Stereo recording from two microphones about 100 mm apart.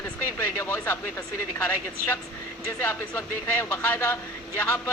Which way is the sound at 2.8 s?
25° left (ahead or behind).